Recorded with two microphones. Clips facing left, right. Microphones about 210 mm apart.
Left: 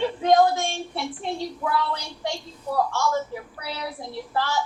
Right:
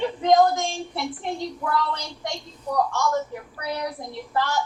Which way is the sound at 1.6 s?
5° left (ahead or behind).